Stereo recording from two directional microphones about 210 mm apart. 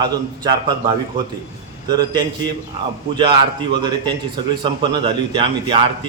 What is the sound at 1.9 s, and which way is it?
Speech, 20° right (ahead or behind).